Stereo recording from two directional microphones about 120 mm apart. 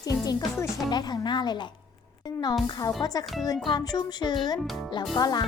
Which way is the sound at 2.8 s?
30° left (ahead or behind).